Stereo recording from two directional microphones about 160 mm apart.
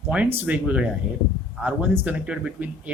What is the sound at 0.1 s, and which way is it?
Speech, 10° right (ahead or behind).